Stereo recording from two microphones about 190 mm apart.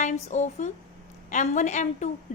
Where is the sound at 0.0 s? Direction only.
40° left (ahead or behind).